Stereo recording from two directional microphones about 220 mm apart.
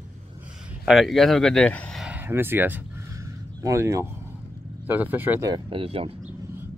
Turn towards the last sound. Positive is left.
turn(degrees=-25)  # may be behind; listen again after turning